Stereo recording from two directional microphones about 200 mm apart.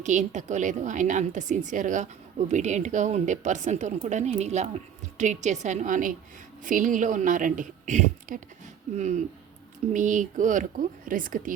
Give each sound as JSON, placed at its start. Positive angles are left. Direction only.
{"t": 0.0, "sound": "a woman's voice", "side_deg": -40}